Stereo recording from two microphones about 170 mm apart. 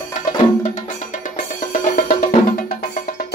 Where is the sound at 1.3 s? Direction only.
50° left (ahead or behind).